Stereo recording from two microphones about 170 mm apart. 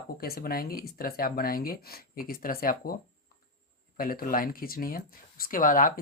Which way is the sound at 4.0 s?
60° left (ahead or behind).